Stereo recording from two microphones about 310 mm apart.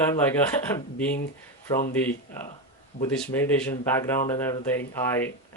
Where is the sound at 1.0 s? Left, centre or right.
Centre.